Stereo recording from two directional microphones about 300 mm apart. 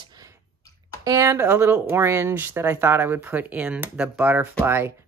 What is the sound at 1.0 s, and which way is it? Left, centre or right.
Speech, centre.